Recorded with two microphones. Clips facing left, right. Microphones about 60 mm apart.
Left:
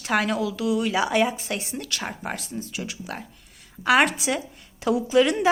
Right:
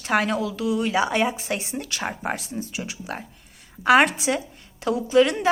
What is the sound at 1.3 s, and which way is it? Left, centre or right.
A woman's voice, centre.